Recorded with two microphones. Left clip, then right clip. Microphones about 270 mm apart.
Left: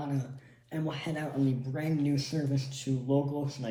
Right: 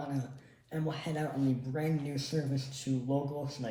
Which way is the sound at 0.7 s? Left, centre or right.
Centre.